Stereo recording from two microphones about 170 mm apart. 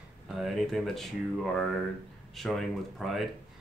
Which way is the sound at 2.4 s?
Centre (ahead or behind).